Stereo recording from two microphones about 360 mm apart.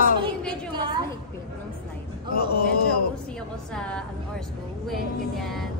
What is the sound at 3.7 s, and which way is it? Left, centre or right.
A man's voice, centre.